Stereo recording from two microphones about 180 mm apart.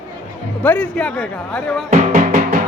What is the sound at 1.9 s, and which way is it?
Music, 45° right (ahead or behind).